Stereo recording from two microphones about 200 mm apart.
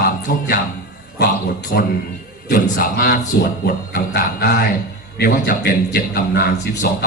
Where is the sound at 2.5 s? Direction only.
45° left (ahead or behind).